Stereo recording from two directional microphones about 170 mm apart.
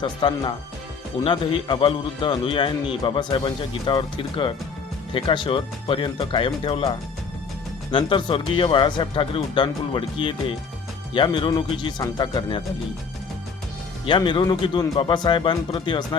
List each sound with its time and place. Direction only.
0.0 s a man's voice: 25° left (ahead or behind)
7.9 s a man's voice: 30° left (ahead or behind)
14.0 s a man's voice: 30° left (ahead or behind)